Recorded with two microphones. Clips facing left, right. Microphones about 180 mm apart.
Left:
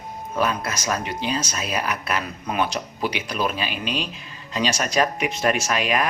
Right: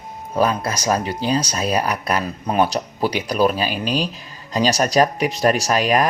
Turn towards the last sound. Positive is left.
turn(degrees=-40)  # may be behind; listen again after turning